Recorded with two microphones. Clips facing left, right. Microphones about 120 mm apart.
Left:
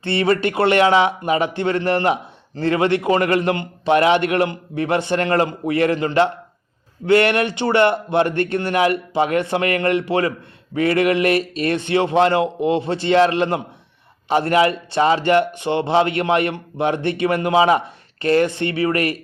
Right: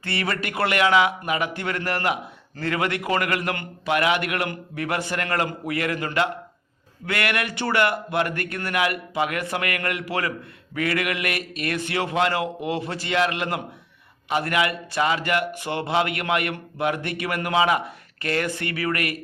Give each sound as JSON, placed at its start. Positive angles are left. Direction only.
{"t": 0.0, "sound": "speech", "side_deg": 25}